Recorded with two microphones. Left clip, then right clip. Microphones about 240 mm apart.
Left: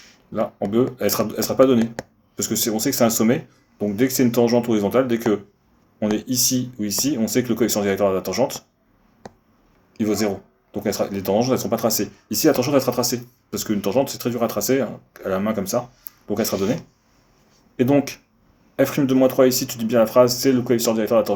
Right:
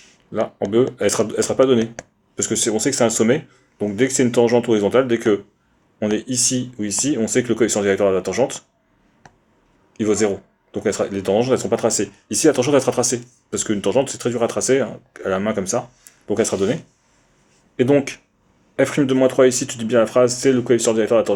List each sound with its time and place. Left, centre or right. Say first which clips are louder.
0.3 s speech: right 2 dB; right
9.9 s speech: right 4 dB; right
17.7 s speech: right 2 dB; right